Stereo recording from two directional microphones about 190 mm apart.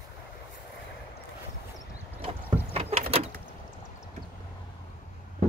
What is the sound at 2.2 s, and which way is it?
Boat, 30° right (ahead or behind).